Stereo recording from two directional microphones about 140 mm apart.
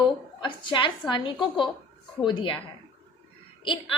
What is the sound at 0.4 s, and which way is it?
A woman's voice, 35° left (ahead or behind).